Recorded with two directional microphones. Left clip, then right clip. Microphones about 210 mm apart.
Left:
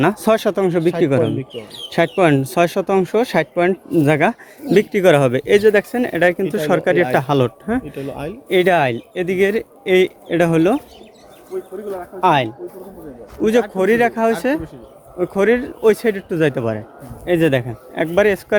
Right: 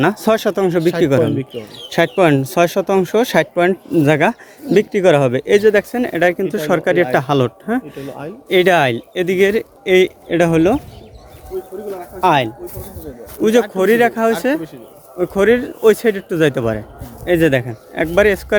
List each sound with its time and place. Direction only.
0.0 s speech: centre (ahead or behind)
1.2 s speech: 50° right (ahead or behind)
2.1 s speech: centre (ahead or behind)
12.2 s speech: 5° right (ahead or behind)